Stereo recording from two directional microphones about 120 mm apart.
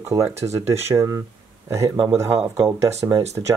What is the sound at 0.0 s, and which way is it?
Speech, 25° right (ahead or behind).